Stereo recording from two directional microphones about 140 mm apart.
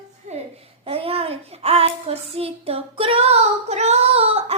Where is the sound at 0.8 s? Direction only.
45° right (ahead or behind).